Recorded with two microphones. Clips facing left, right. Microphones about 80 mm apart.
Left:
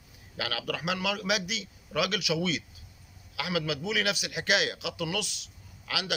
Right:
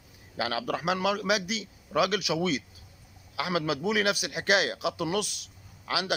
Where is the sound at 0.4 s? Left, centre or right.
Right.